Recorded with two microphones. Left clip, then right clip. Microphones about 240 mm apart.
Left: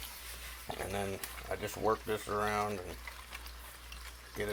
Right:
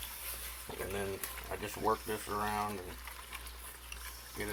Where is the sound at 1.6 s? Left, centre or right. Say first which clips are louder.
Left 1 dB; left.